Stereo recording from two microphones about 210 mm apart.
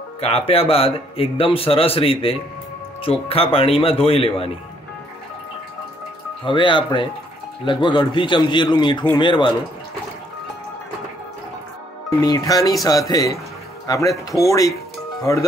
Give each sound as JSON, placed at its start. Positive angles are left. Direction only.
{"t": 0.2, "sound": "speech", "side_deg": 30}
{"t": 6.4, "sound": "speech", "side_deg": 25}
{"t": 12.2, "sound": "speech", "side_deg": 20}